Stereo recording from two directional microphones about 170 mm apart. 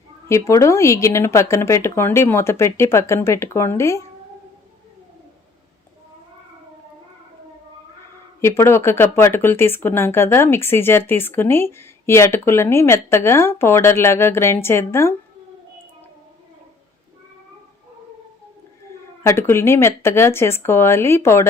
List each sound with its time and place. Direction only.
0.3 s speech: 15° left (ahead or behind)
8.4 s speech: 15° left (ahead or behind)
19.2 s speech: 15° left (ahead or behind)